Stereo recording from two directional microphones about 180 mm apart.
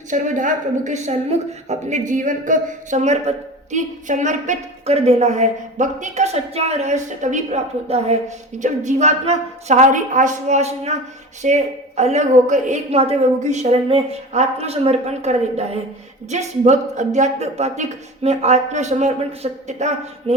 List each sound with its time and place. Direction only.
0.1 s a woman's voice: 45° right (ahead or behind)